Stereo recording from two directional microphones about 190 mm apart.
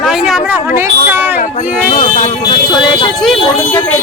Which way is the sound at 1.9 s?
30° left (ahead or behind).